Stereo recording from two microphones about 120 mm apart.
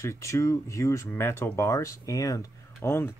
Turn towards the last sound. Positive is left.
turn(degrees=20)  # may be behind; listen again after turning